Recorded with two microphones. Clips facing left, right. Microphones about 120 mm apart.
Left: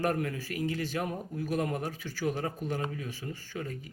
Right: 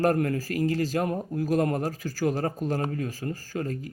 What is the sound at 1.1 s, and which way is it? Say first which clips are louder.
Speech: right 7 dB; 65° right (ahead or behind).